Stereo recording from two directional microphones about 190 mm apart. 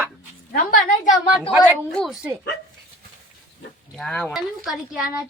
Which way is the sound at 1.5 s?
Centre (ahead or behind).